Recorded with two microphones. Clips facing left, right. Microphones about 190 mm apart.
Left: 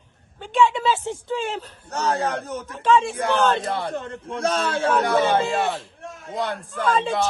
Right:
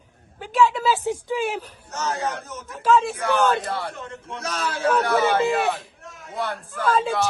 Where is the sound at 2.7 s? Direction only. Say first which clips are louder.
Even; 5° right (ahead or behind).